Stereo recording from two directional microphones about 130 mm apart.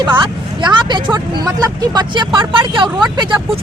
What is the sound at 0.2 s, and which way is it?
Vehicle, 35° right (ahead or behind).